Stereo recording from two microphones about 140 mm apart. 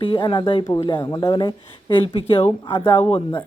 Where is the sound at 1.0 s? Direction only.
25° left (ahead or behind).